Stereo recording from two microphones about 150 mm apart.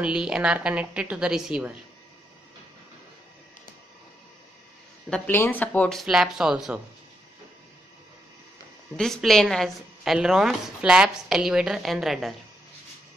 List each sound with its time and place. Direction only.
0.0 s a woman's voice: 5° right (ahead or behind)
5.1 s speech: 10° left (ahead or behind); by 6.8 s 5° right (ahead or behind)
8.9 s speech: 5° left (ahead or behind)